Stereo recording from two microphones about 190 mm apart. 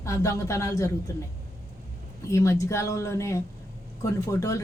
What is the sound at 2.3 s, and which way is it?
A woman's voice, 15° left (ahead or behind).